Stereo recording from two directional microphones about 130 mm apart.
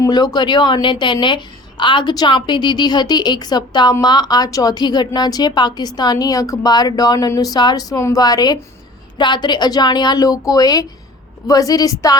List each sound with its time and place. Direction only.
0.0 s a woman's voice: 30° left (ahead or behind)